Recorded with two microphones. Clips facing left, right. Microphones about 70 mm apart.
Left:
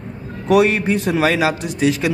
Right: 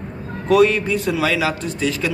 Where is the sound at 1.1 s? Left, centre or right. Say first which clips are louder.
Left 4 dB; left.